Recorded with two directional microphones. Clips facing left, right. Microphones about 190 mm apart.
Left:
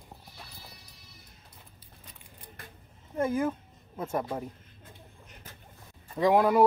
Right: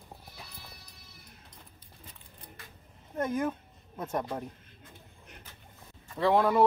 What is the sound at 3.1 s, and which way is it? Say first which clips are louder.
Speech: left 2 dB; 10° left (ahead or behind).